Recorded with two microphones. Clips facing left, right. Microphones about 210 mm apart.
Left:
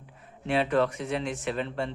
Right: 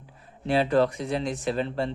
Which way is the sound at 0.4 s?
35° right (ahead or behind).